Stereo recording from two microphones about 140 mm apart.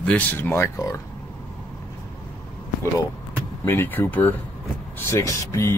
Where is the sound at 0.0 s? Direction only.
10° left (ahead or behind).